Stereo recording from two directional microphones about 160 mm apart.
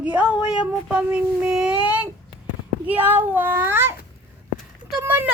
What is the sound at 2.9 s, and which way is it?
Speech, 10° right (ahead or behind).